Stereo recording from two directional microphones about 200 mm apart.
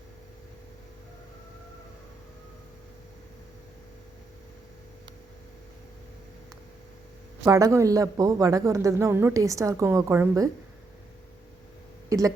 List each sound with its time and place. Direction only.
7.4 s a man's voice: 15° right (ahead or behind)
12.0 s speech: 15° right (ahead or behind)